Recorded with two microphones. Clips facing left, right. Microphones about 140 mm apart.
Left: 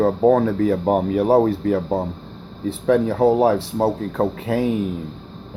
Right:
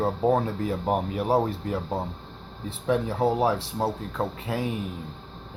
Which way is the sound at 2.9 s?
55° left (ahead or behind).